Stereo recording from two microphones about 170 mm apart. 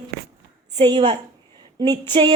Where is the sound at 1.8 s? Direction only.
25° right (ahead or behind).